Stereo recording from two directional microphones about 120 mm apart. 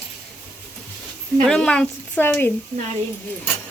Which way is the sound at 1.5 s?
5° left (ahead or behind).